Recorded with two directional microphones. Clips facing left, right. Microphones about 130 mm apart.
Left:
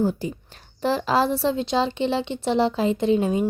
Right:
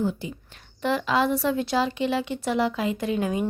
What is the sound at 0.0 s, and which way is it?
A woman's voice, 40° left (ahead or behind).